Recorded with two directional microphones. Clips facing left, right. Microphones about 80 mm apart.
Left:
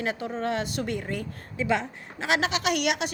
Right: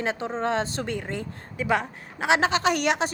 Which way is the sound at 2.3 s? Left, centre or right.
Right.